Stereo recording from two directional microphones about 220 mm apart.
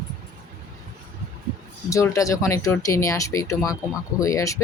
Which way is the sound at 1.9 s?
15° left (ahead or behind).